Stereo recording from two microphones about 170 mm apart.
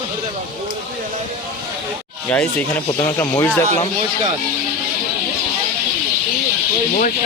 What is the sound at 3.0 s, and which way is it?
Speech, 15° left (ahead or behind).